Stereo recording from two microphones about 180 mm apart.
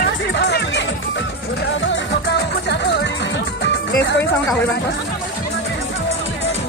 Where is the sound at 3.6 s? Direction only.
65° left (ahead or behind).